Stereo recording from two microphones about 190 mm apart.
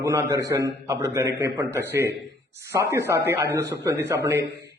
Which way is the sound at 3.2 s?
15° right (ahead or behind).